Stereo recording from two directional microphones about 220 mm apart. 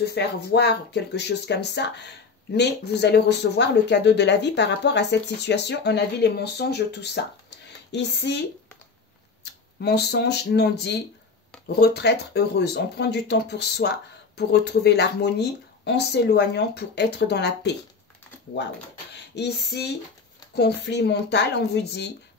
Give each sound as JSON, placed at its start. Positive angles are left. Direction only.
{"t": 0.1, "sound": "speech", "side_deg": 50}
{"t": 19.1, "sound": "a sound", "side_deg": 50}
{"t": 20.5, "sound": "speech", "side_deg": 50}